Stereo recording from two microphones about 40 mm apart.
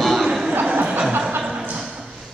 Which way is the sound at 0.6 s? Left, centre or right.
Right.